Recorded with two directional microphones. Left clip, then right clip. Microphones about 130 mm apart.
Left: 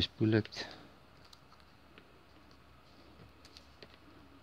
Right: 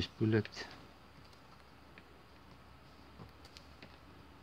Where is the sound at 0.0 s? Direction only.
50° left (ahead or behind).